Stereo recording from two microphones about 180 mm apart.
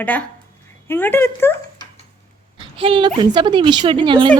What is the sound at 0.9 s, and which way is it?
Speech, 10° left (ahead or behind).